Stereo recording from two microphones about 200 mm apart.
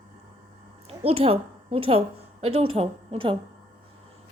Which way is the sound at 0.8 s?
30° right (ahead or behind).